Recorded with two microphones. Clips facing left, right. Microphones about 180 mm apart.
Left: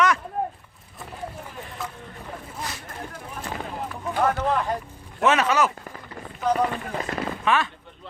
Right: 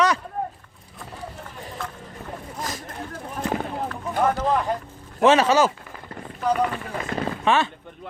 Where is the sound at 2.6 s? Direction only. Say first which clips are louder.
Right 4 dB; 40° right (ahead or behind).